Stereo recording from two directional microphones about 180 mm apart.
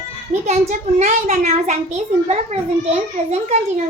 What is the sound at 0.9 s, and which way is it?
A child's voice, 40° right (ahead or behind).